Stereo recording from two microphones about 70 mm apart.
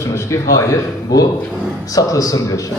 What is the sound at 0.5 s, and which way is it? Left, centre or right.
Speech, left.